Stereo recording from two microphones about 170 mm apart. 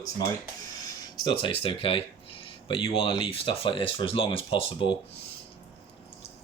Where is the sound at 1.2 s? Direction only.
25° left (ahead or behind).